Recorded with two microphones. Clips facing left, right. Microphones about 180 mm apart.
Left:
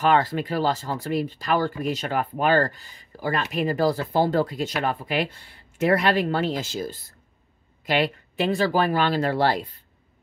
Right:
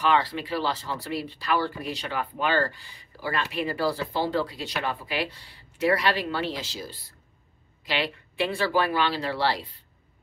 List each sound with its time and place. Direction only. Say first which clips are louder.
0.0 s speech: left 3 dB; 45° left (ahead or behind)